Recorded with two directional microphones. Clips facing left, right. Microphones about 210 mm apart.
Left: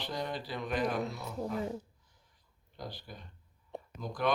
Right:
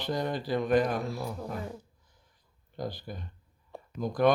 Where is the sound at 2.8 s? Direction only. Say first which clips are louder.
Right 8 dB; 50° right (ahead or behind).